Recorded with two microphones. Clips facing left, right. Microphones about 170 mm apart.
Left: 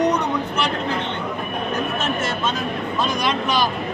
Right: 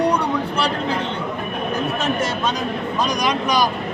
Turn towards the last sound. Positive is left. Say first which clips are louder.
# right 2 dB
turn(degrees=-10)  # may be behind; listen again after turning